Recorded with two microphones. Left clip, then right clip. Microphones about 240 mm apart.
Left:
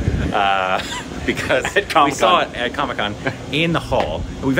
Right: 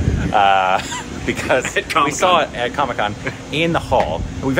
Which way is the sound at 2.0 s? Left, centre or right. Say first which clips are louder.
Even; centre.